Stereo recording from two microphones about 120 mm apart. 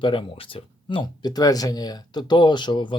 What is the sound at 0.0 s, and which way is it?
Speech, 45° left (ahead or behind).